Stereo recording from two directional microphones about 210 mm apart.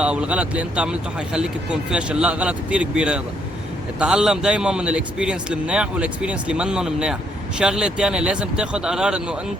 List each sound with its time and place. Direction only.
0.0 s a man's voice: 5° right (ahead or behind)